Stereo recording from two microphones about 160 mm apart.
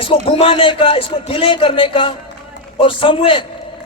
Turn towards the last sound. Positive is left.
turn(degrees=35)  # may be behind; listen again after turning